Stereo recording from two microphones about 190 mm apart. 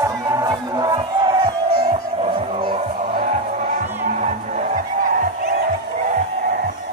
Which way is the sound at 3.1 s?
50° right (ahead or behind).